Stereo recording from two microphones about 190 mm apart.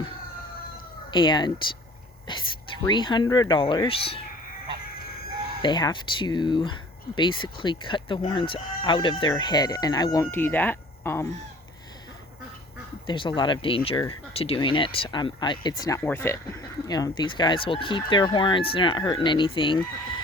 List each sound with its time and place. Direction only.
1.1 s speech: 25° left (ahead or behind)
4.9 s chicken: 50° left (ahead or behind)
5.6 s speech: 25° left (ahead or behind)
13.1 s speech: 25° left (ahead or behind)